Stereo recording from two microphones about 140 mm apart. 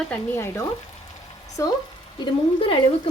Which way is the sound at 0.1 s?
15° left (ahead or behind).